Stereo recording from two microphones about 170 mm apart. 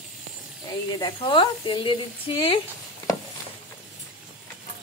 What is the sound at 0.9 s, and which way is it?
Speech, 30° left (ahead or behind).